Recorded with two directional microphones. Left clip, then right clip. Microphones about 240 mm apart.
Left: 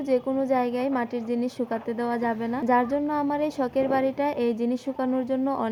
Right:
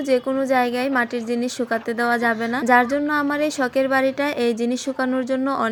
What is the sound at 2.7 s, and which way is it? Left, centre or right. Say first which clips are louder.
Speech: right 6 dB; centre.